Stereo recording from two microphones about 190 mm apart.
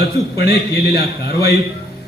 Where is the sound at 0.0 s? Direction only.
55° left (ahead or behind).